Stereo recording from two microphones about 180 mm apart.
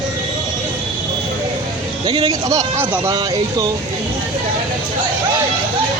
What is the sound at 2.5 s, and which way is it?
Speech, 20° right (ahead or behind).